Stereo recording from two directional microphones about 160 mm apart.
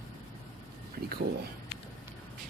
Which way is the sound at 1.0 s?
85° right.